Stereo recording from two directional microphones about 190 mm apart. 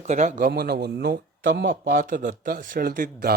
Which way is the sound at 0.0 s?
40° right (ahead or behind).